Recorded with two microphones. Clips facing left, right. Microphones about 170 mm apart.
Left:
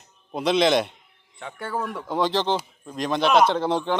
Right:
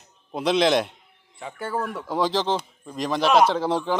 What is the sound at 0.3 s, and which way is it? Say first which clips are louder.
Speech: even; centre (ahead or behind).